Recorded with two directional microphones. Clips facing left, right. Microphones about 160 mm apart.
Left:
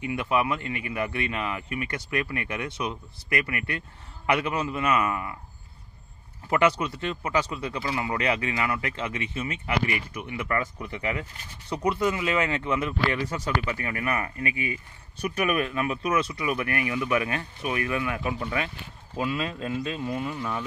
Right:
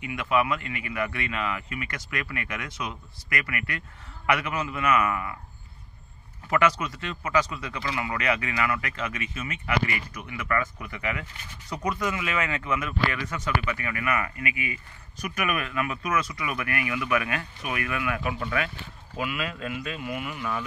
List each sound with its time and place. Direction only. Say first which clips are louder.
0.0 s speech: even; 30° left (ahead or behind)
6.5 s a man's voice: left 1 dB; 30° left (ahead or behind)